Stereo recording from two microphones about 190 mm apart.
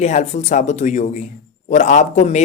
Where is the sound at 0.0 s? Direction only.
40° left (ahead or behind).